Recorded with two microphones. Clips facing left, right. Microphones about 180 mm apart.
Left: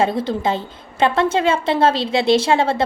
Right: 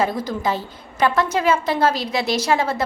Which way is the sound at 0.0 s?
25° left (ahead or behind).